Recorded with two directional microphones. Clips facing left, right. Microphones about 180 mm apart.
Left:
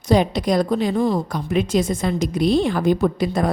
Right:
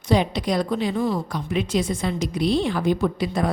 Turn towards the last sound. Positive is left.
turn(degrees=45)  # may be behind; listen again after turning